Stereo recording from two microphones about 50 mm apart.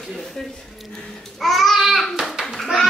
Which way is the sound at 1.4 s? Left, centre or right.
Centre.